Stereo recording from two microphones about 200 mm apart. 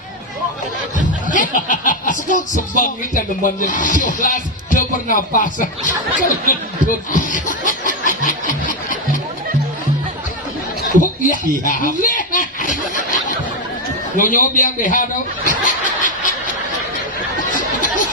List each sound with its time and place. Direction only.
1.3 s speech: 40° left (ahead or behind)
7.1 s snicker: 40° left (ahead or behind)
11.0 s speech: 40° left (ahead or behind)
14.2 s speech: 40° left (ahead or behind)
15.4 s snicker: 40° left (ahead or behind)